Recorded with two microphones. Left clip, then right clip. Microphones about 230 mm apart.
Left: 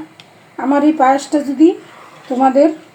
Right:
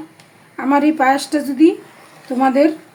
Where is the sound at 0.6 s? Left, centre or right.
Centre.